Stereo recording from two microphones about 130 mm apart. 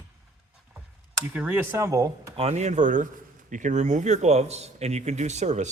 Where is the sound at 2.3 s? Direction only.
50° right (ahead or behind).